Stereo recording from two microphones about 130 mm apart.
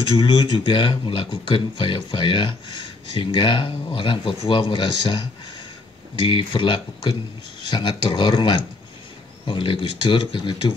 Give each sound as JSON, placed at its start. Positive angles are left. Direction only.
{"t": 0.2, "sound": "speech", "side_deg": 40}